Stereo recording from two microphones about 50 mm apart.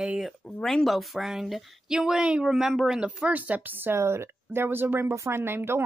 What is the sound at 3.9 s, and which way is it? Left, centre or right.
Speech, right.